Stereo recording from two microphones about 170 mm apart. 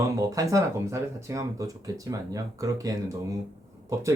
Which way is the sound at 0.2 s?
20° right (ahead or behind).